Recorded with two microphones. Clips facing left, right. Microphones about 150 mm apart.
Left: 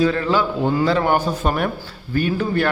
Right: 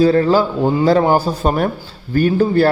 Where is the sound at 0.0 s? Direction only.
35° right (ahead or behind).